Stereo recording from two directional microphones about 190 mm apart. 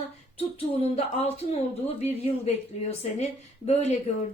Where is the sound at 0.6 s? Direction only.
35° left (ahead or behind).